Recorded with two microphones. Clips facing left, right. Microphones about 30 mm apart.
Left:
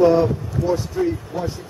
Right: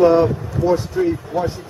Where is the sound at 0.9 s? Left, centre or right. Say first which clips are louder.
Right 3 dB; centre.